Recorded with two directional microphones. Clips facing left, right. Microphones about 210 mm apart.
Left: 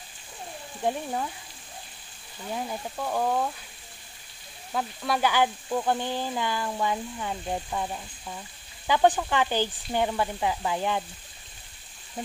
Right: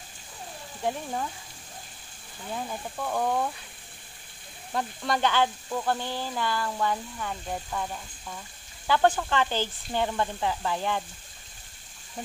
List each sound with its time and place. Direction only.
0.8 s speech: 10° left (ahead or behind)
2.5 s speech: 10° left (ahead or behind)
4.7 s speech: 5° left (ahead or behind)